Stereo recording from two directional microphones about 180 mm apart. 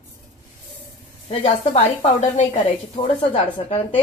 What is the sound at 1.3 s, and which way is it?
Speech, 35° left (ahead or behind).